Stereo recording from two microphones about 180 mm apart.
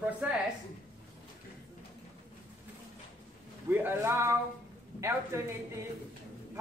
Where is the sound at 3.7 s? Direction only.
10° right (ahead or behind).